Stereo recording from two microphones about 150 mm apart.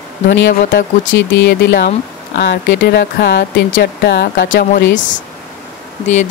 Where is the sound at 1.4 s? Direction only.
90° left; by 4.8 s 70° left (ahead or behind).